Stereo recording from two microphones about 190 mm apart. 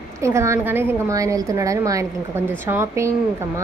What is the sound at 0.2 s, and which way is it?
A woman's voice, 15° right (ahead or behind).